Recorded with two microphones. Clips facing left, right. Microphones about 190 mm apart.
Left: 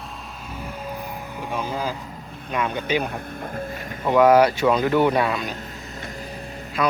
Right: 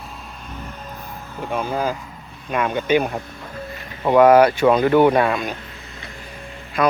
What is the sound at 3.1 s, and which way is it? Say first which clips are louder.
Speech: right 1 dB; 55° left (ahead or behind).